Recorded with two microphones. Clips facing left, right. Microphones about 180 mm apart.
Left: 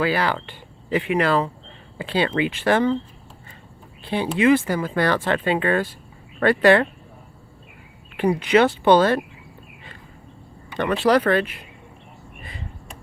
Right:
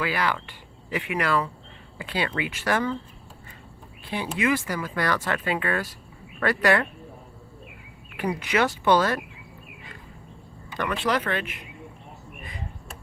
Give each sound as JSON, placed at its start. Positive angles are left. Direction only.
{"t": 0.0, "sound": "speech", "side_deg": 30}
{"t": 4.0, "sound": "speech", "side_deg": 30}
{"t": 8.1, "sound": "speech", "side_deg": 30}
{"t": 10.8, "sound": "speech", "side_deg": 35}